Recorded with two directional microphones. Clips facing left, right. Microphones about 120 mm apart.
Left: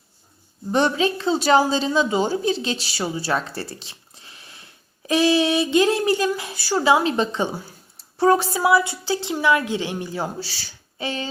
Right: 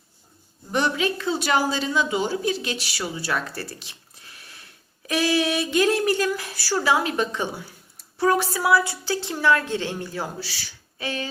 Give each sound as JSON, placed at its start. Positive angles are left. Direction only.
{"t": 0.7, "sound": "a woman's voice", "side_deg": 30}
{"t": 8.5, "sound": "a woman's voice", "side_deg": 20}